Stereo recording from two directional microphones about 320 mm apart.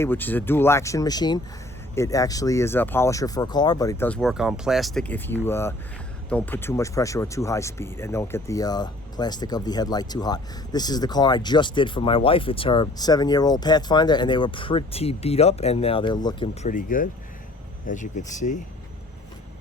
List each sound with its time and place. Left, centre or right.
0.0 s speech: centre
16.6 s speech: left